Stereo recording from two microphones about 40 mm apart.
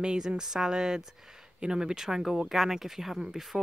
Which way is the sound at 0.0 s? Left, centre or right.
Right.